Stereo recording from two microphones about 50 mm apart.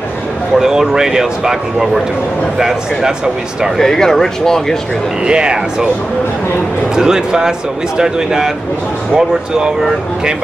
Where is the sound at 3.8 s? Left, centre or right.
Centre.